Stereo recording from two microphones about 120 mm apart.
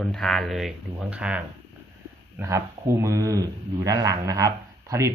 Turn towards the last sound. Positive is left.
turn(degrees=-25)  # may be behind; listen again after turning